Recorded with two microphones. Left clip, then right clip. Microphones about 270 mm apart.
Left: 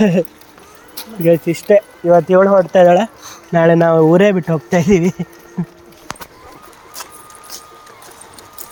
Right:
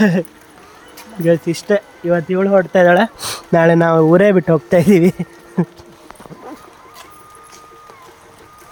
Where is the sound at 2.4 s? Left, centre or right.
Centre.